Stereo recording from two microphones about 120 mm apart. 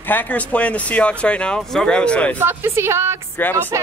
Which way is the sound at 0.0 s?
15° left (ahead or behind).